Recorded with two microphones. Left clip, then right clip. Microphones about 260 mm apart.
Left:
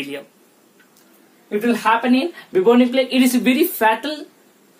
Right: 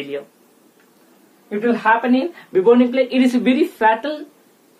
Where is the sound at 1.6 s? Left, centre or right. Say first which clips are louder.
Right 2 dB; centre.